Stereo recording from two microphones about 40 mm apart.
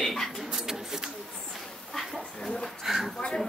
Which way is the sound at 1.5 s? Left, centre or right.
Centre.